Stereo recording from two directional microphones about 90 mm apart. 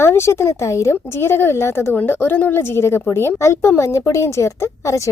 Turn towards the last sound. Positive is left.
turn(degrees=35)  # may be behind; listen again after turning